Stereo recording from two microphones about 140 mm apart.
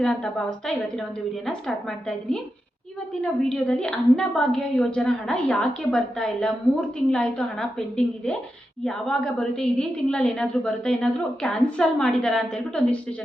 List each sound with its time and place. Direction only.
0.0 s a woman's voice: 5° left (ahead or behind)